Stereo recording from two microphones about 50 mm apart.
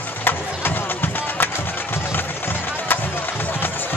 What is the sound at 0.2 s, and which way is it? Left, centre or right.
Music, left.